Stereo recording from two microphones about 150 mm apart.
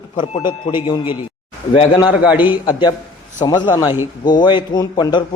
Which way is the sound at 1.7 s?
35° left (ahead or behind).